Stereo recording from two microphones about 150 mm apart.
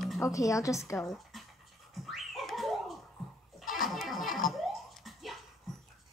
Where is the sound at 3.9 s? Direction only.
Centre (ahead or behind).